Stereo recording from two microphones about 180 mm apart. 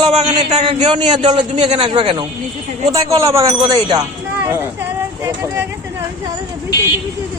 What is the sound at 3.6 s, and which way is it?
Speech, 20° right (ahead or behind).